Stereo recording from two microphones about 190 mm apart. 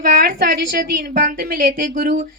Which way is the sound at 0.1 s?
55° right (ahead or behind).